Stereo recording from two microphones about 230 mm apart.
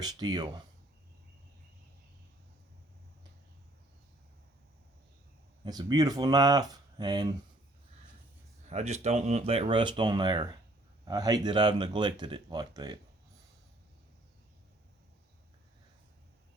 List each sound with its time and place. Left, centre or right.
0.0 s speech: centre
5.6 s speech: centre
8.7 s speech: right